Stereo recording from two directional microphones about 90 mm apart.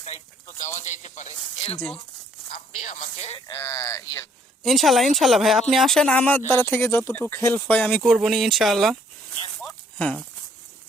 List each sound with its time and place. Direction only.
1.4 s speech: 5° left (ahead or behind)
3.5 s speech: 35° left (ahead or behind)
4.6 s speech: centre (ahead or behind); by 8.0 s 20° left (ahead or behind)
8.0 s speech: centre (ahead or behind)
9.3 s a sound: 10° left (ahead or behind)